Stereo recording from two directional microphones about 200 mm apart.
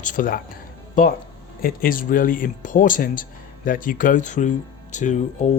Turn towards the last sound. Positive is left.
turn(degrees=40)  # may be behind; listen again after turning